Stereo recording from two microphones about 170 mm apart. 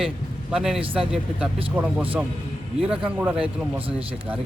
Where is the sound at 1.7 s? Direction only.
10° right (ahead or behind).